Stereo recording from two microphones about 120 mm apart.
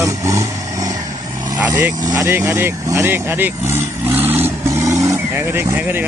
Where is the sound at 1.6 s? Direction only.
15° right (ahead or behind).